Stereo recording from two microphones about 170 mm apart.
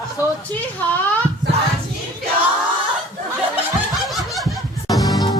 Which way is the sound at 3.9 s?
Centre (ahead or behind).